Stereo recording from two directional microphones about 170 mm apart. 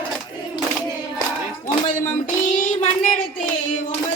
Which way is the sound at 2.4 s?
50° left (ahead or behind).